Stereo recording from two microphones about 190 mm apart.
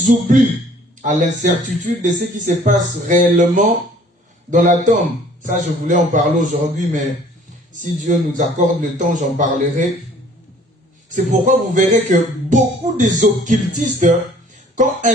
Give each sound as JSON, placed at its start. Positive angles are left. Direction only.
{"t": 0.0, "sound": "speech", "side_deg": -40}
{"t": 11.1, "sound": "speech", "side_deg": -40}